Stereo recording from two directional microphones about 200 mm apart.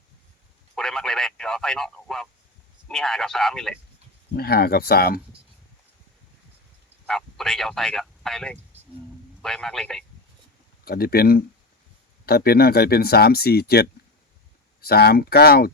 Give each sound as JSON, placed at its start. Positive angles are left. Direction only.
{"t": 0.8, "sound": "speech", "side_deg": 0}
{"t": 4.4, "sound": "speech", "side_deg": 50}
{"t": 7.1, "sound": "speech", "side_deg": 0}
{"t": 10.8, "sound": "speech", "side_deg": 50}